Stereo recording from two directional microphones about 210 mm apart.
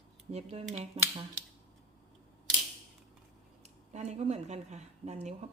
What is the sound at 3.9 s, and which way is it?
Speech, 30° right (ahead or behind).